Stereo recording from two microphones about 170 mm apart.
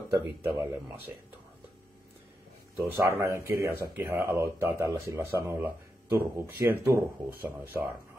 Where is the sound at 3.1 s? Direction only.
15° right (ahead or behind).